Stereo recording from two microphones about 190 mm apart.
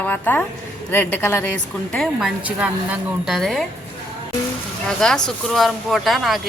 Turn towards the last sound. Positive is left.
turn(degrees=0)  # may be behind; listen again after turning